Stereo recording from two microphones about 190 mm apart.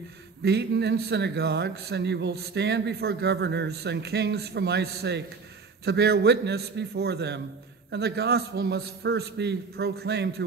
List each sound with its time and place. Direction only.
0.4 s a man's voice: 60° right (ahead or behind)